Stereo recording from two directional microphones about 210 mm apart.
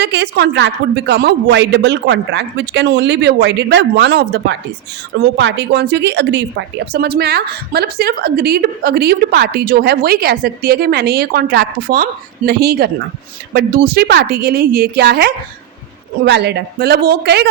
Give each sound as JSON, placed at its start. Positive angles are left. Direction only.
{"t": 0.0, "sound": "a woman's voice", "side_deg": -55}